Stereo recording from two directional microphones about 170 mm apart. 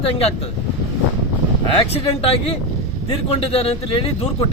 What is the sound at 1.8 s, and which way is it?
A man's voice, 35° left (ahead or behind).